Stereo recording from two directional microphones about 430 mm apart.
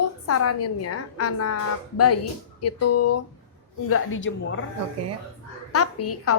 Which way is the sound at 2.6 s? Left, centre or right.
Left.